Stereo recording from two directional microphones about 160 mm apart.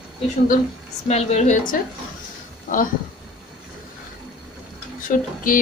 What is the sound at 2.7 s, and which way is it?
Speech, 60° left (ahead or behind).